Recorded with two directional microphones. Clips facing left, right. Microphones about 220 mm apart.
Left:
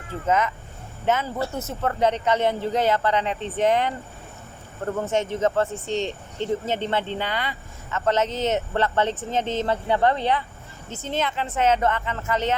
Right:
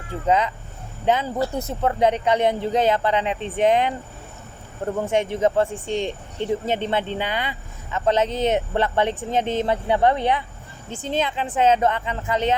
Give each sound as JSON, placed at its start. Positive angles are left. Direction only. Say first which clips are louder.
{"t": 0.3, "sound": "speech", "louder": "right 2 dB", "side_deg": -15}